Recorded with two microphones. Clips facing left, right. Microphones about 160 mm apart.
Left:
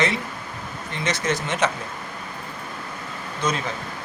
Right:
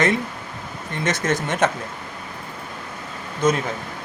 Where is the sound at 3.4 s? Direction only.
50° right (ahead or behind).